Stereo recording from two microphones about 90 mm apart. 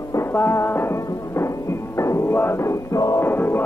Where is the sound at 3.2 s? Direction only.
25° left (ahead or behind).